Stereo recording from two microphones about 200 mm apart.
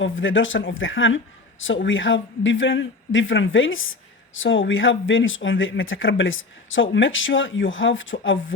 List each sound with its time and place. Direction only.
0.0 s speech: 75° left (ahead or behind)